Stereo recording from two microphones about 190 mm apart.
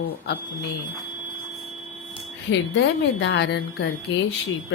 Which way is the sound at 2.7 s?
70° left (ahead or behind).